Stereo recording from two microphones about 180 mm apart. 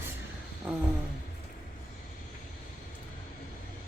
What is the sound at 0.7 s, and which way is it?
Speech, 5° right (ahead or behind).